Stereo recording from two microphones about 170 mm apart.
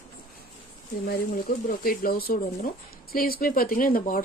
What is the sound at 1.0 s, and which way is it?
Speech, 60° left (ahead or behind).